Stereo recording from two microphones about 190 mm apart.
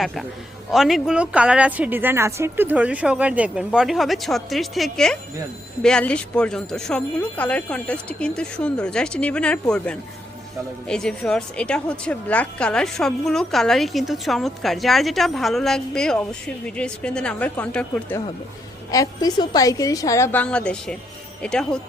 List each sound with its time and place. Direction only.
0.0 s a woman's voice: centre (ahead or behind)
18.9 s a woman's voice: 20° left (ahead or behind)